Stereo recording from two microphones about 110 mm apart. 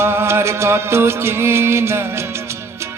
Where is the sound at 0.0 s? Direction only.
20° right (ahead or behind).